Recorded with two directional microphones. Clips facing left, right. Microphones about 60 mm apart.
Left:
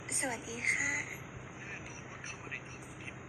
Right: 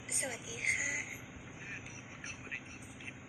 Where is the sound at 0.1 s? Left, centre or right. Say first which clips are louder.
Left 4 dB; left.